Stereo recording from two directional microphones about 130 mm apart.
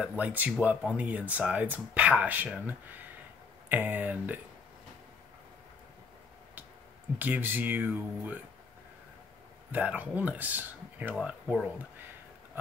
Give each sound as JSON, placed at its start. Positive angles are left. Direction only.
{"t": 0.0, "sound": "speech", "side_deg": -10}
{"t": 7.2, "sound": "speech", "side_deg": -15}
{"t": 9.7, "sound": "speech", "side_deg": -10}